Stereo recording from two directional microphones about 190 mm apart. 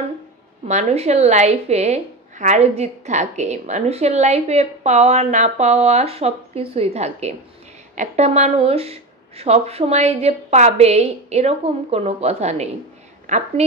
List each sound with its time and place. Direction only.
0.7 s a woman's voice: 35° right (ahead or behind)